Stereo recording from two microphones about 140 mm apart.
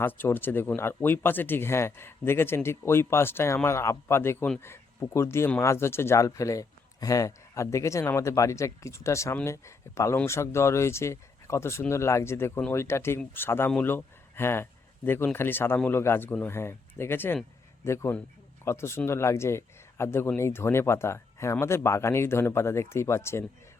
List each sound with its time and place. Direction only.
0.0 s a man's voice: 15° left (ahead or behind)